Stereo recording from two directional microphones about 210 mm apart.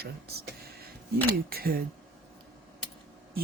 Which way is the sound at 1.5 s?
45° right (ahead or behind).